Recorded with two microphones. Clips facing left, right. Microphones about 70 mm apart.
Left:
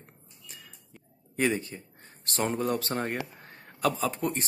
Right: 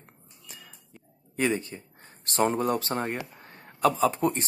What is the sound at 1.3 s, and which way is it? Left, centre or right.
Speech, centre.